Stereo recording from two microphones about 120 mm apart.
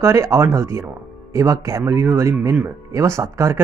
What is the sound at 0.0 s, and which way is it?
Speech, 25° right (ahead or behind).